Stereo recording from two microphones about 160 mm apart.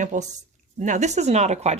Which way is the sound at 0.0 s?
50° right (ahead or behind).